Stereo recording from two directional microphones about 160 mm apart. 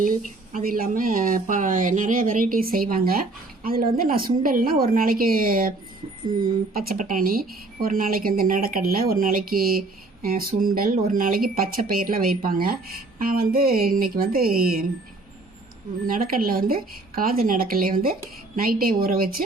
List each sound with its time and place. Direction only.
0.0 s a woman's voice: 55° right (ahead or behind)
16.0 s a woman's voice: 65° right (ahead or behind)